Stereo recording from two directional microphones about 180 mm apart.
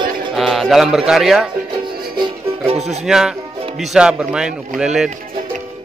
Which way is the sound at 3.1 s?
5° right (ahead or behind).